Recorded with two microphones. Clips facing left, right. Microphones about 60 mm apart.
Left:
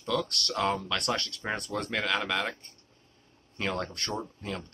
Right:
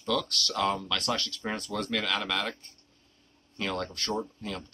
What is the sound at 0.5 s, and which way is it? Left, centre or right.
Speech, centre.